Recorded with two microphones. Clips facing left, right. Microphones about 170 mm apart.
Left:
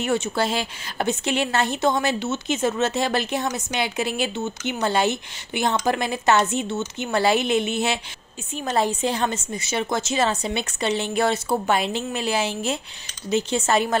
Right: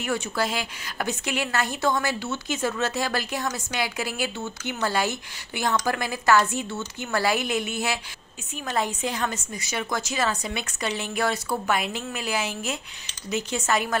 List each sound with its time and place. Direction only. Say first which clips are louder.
0.0 s a woman's voice: left 4 dB; 25° left (ahead or behind)